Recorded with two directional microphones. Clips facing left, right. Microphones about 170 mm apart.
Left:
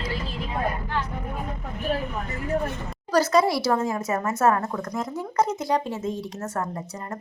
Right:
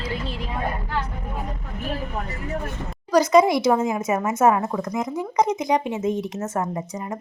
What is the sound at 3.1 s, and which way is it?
Speech, 15° right (ahead or behind).